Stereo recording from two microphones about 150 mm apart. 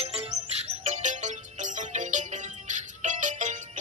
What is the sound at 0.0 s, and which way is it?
Music, 40° right (ahead or behind).